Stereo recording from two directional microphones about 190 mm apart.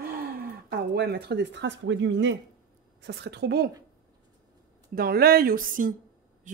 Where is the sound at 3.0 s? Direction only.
65° right (ahead or behind).